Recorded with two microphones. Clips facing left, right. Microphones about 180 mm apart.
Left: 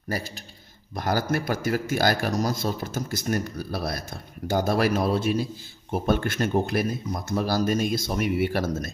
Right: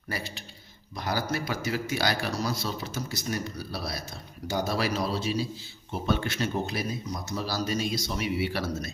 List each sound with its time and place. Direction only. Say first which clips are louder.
0.1 s a man's voice: left 4 dB; 45° left (ahead or behind)